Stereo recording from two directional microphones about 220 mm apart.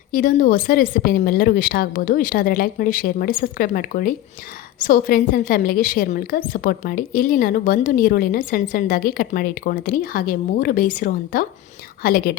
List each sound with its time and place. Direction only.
0.1 s a woman's voice: 40° left (ahead or behind)